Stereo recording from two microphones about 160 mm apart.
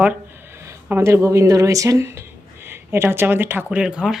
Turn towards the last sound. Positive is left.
turn(degrees=-5)  # may be behind; listen again after turning